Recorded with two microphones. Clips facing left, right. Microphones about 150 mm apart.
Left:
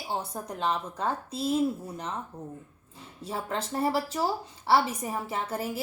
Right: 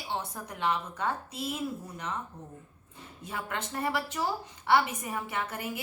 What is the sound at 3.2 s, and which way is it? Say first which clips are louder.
A woman's voice: left 4 dB; 35° left (ahead or behind).